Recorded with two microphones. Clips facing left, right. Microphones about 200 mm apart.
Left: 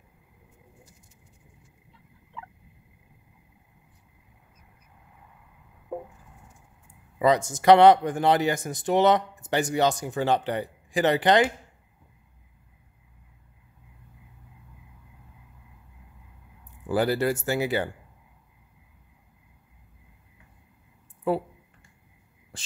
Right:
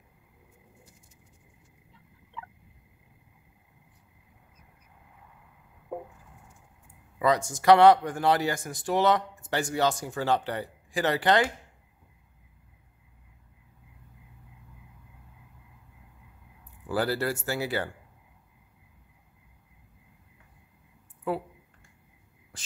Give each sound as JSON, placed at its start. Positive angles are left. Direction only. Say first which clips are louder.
{"t": 7.2, "sound": "speech", "louder": "left 3 dB", "side_deg": 20}
{"t": 16.8, "sound": "speech", "louder": "left 4 dB", "side_deg": 15}
{"t": 21.3, "sound": "speech", "louder": "left 5 dB", "side_deg": 30}